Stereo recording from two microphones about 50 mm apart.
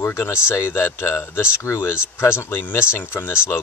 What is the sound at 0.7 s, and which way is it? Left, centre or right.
Speech, left.